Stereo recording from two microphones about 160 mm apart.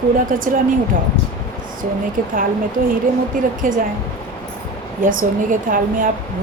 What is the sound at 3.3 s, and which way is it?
Speech, 60° right (ahead or behind).